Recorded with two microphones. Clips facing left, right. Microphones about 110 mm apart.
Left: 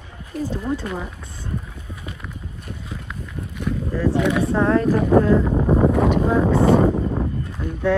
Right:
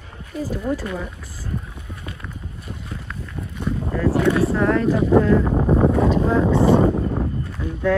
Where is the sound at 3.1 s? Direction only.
5° left (ahead or behind).